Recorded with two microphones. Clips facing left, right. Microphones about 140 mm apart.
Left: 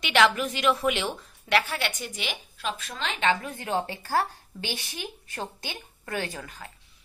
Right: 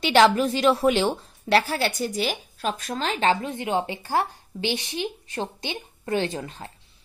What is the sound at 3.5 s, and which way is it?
A woman's voice, 20° right (ahead or behind).